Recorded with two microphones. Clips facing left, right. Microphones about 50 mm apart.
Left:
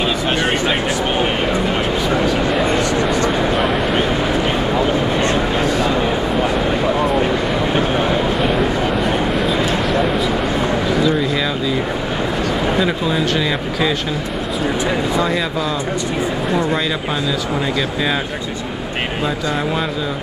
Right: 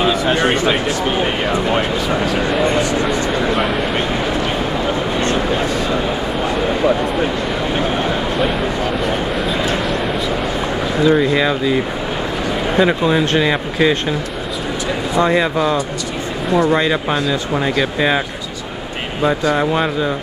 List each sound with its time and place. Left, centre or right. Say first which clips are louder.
9.5 s a sound: left 1 dB; centre
11.1 s a sound: right 4 dB; centre
12.7 s speech: right 3 dB; centre
15.2 s speech: right 4 dB; right
17.7 s speech: right 3 dB; centre
19.5 s speech: right 4 dB; right